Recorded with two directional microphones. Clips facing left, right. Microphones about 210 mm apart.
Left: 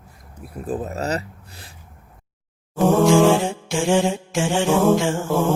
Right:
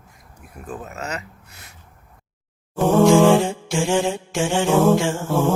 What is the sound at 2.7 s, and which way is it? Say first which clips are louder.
Music: right 1 dB; centre (ahead or behind).